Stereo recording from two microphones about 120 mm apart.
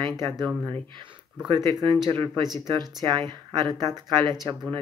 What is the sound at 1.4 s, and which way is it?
Speech, 40° right (ahead or behind).